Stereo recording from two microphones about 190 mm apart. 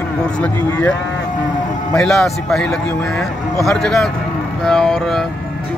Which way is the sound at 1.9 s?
Centre (ahead or behind).